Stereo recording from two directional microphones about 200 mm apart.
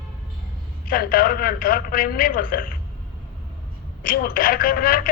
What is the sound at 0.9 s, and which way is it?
A woman's voice, 45° left (ahead or behind).